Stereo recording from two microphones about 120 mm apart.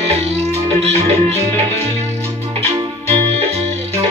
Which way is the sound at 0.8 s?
60° right (ahead or behind).